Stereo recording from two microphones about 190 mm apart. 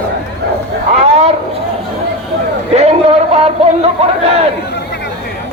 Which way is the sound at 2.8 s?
35° right (ahead or behind).